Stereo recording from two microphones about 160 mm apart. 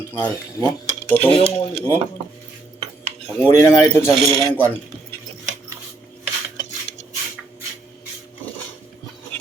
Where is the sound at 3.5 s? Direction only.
15° left (ahead or behind).